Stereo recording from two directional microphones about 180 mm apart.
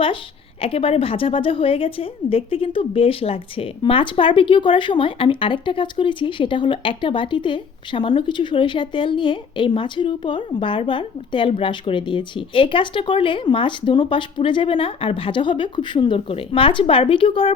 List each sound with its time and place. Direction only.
0.6 s a woman's voice: 30° left (ahead or behind)